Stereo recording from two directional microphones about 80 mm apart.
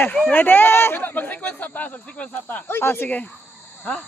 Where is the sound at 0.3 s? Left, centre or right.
Left.